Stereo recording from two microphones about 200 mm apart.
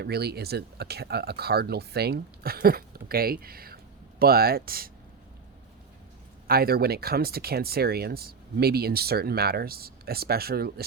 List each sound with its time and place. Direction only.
0.0 s speech: 55° right (ahead or behind)
6.5 s speech: 50° right (ahead or behind)